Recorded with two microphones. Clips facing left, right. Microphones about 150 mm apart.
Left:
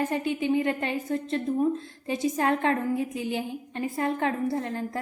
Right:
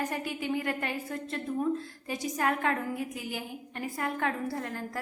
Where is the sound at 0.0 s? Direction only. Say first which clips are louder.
Left 6 dB; 25° left (ahead or behind).